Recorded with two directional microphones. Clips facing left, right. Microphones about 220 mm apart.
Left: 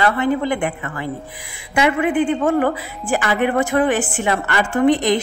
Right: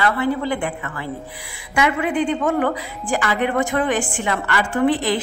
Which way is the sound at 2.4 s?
40° left (ahead or behind).